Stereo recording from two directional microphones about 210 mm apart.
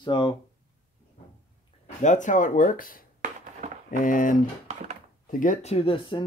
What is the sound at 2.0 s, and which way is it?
Speech, 35° left (ahead or behind).